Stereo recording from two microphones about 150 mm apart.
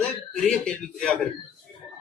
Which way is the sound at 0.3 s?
5° left (ahead or behind).